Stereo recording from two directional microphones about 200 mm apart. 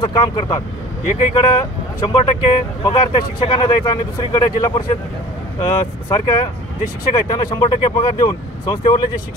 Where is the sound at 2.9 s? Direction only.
30° left (ahead or behind).